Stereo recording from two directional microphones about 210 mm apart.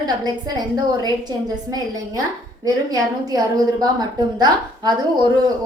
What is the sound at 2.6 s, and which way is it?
A woman's voice, 15° right (ahead or behind).